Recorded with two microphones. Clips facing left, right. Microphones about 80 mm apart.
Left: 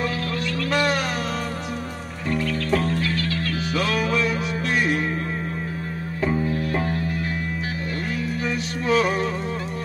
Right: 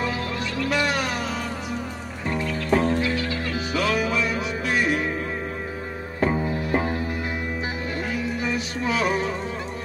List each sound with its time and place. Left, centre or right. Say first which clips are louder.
0.7 s music: left 2 dB; centre
2.3 s music: even; right
3.7 s music: even; centre
8.5 s music: left 5 dB; centre